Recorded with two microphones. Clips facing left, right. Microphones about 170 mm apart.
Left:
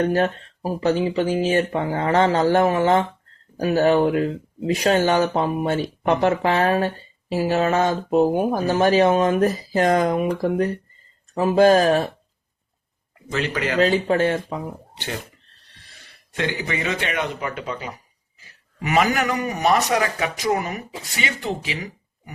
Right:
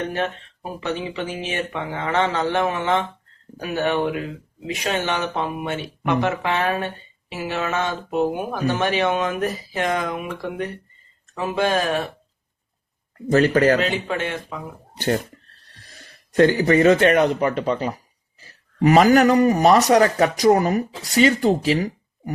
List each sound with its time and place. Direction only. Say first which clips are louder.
0.0 s speech: left 5 dB; 40° left (ahead or behind)
13.3 s speech: right 9 dB; 40° right (ahead or behind)
13.8 s speech: left 6 dB; 35° left (ahead or behind)
14.9 s speech: right 11 dB; 45° right (ahead or behind)
16.3 s speech: right 10 dB; 40° right (ahead or behind)